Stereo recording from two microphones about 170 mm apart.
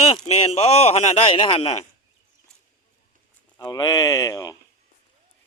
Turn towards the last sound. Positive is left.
turn(degrees=20)  # may be behind; listen again after turning